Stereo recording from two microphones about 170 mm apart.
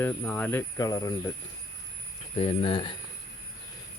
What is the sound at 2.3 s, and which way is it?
Speech, 35° left (ahead or behind).